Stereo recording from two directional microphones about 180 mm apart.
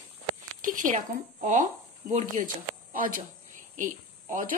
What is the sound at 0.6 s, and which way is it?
Speech, 50° right (ahead or behind).